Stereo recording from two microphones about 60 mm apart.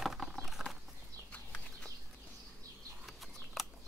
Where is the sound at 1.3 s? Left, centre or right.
Left.